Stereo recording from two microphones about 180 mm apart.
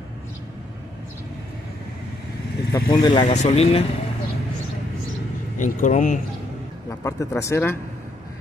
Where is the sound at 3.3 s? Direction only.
35° left (ahead or behind).